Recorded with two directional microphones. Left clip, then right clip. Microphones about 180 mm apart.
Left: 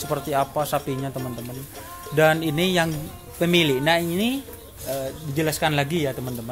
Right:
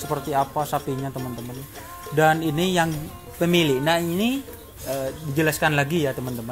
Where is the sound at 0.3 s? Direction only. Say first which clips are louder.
Even; 20° left (ahead or behind).